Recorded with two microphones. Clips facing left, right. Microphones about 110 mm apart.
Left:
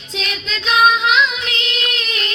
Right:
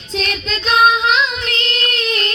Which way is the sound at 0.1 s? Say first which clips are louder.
Right 4 dB; 45° right (ahead or behind).